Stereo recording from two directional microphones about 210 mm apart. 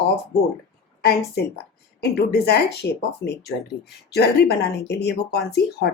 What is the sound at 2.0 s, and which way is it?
Speech, 50° left (ahead or behind).